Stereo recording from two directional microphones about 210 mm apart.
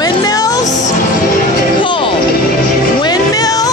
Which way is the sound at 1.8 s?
25° left (ahead or behind).